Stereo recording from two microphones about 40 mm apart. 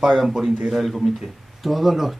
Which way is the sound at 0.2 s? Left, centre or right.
Centre.